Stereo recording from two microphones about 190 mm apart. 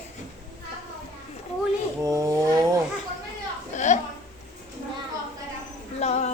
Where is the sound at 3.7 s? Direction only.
40° left (ahead or behind).